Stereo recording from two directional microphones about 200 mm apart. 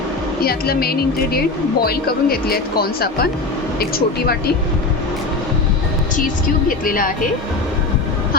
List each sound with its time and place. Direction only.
0.4 s speech: 50° left (ahead or behind)
6.1 s speech: 45° left (ahead or behind)